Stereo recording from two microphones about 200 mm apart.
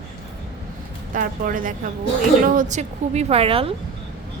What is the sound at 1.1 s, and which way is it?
A woman's voice, 45° right (ahead or behind).